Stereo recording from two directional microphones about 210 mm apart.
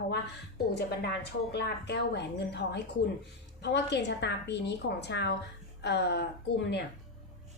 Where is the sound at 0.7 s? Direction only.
55° left (ahead or behind).